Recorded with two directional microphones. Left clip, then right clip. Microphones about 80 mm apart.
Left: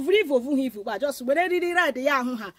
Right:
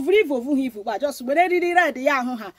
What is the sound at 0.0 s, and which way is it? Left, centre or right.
Speech, left.